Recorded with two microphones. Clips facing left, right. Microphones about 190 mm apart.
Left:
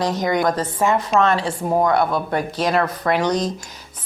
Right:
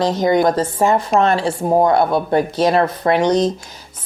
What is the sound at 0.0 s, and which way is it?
A woman's voice, 25° right (ahead or behind).